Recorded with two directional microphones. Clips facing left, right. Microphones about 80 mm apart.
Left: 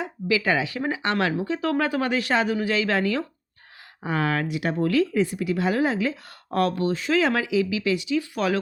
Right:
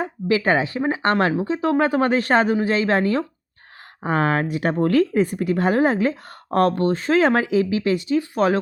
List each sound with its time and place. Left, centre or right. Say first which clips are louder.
0.0 s speech: right 4 dB; right